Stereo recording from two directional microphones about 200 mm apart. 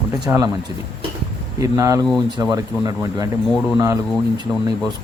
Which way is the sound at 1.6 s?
15° right (ahead or behind).